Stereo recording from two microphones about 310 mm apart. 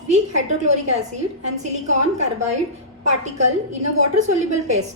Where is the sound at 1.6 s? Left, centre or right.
Right.